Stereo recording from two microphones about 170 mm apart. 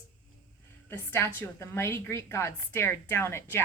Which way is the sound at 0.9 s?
15° left (ahead or behind).